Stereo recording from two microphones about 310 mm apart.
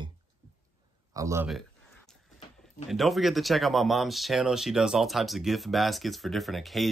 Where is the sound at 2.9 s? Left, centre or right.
Centre.